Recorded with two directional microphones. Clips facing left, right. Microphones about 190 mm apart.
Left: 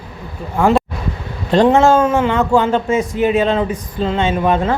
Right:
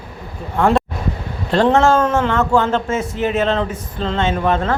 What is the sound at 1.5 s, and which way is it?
A man's voice, 15° left (ahead or behind).